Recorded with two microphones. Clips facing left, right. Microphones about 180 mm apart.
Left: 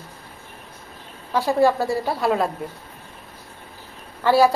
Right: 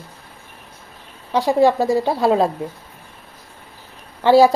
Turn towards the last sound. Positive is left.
turn(degrees=-25)  # may be behind; listen again after turning